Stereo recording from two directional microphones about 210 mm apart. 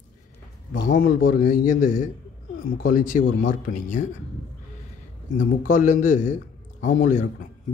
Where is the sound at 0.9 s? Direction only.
40° left (ahead or behind).